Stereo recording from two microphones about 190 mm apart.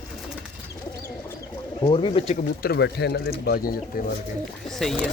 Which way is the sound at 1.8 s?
25° left (ahead or behind).